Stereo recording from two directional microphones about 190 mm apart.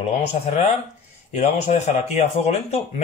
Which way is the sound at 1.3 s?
40° left (ahead or behind).